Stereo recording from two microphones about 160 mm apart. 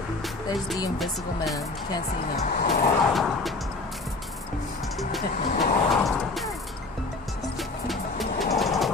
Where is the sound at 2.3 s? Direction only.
55° left (ahead or behind).